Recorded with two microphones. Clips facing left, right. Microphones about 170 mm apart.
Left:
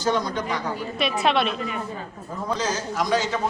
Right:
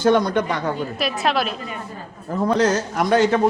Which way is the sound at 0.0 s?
60° right (ahead or behind).